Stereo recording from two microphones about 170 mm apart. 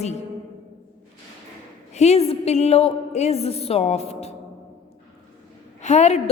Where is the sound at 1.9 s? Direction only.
40° left (ahead or behind).